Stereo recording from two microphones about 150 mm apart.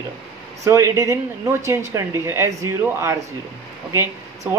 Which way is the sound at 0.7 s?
20° right (ahead or behind).